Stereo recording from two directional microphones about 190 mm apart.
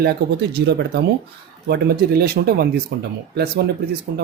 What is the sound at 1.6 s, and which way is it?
Speech, 55° right (ahead or behind).